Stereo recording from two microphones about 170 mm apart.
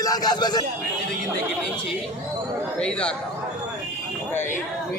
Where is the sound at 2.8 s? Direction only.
5° left (ahead or behind).